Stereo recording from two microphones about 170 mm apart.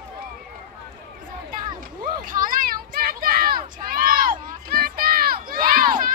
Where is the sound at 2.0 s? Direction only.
55° right (ahead or behind).